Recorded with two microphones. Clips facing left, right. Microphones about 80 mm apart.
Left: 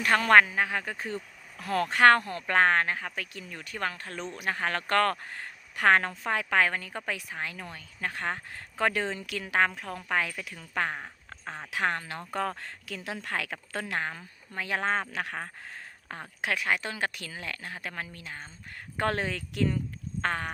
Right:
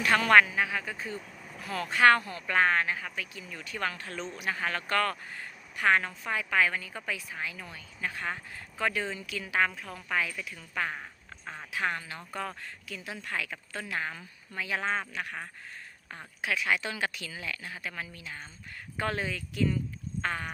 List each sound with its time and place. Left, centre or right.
0.0 s speech: left
9.4 s speech: left
11.7 s speech: left
14.1 s speech: left
14.6 s speech: left
15.1 s speech: left
16.0 s speech: left
18.9 s speech: left